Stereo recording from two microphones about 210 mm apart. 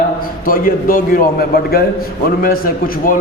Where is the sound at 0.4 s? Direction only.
40° left (ahead or behind).